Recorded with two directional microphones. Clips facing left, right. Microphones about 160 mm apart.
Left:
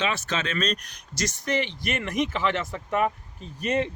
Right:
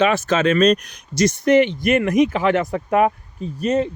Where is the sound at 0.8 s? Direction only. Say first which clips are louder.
Right 12 dB; 55° right (ahead or behind).